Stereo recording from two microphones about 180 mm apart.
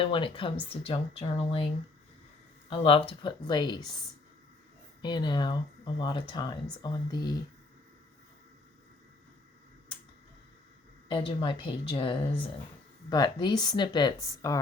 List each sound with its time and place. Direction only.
0.0 s speech: 30° left (ahead or behind)
5.0 s speech: 25° left (ahead or behind)
11.1 s speech: 30° left (ahead or behind)